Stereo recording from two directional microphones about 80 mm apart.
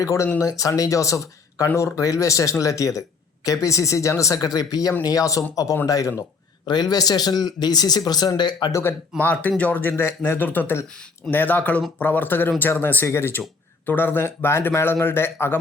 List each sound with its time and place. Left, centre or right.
0.0 s speech: left
6.7 s speech: left
8.7 s speech: left
9.1 s a man's voice: centre